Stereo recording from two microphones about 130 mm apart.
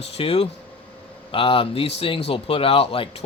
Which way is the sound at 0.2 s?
50° left (ahead or behind).